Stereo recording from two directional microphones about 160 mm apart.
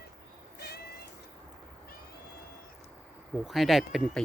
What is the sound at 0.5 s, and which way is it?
Cat, 90° left.